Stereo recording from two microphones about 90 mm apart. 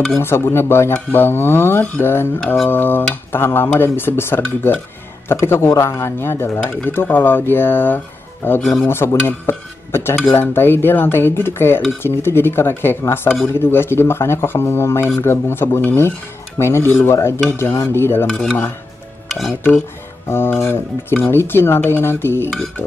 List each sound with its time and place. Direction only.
0.2 s speech: 30° left (ahead or behind)
2.4 s a sound: centre (ahead or behind)
2.7 s speech: 25° left (ahead or behind)
8.5 s speech: 5° left (ahead or behind)
8.8 s speech: 25° left (ahead or behind)
13.3 s speech: 45° left (ahead or behind)
13.6 s speech: 25° left (ahead or behind)
18.3 s speech: 10° left (ahead or behind)
19.2 s stir: centre (ahead or behind)
20.2 s speech: 25° left (ahead or behind)